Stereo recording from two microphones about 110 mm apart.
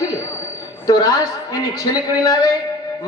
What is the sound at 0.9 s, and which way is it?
A woman's voice, 35° left (ahead or behind).